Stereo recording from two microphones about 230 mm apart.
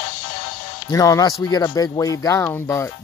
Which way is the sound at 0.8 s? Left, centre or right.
Centre.